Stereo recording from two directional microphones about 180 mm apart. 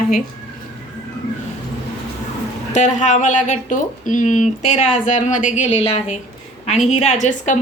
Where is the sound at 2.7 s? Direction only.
40° left (ahead or behind).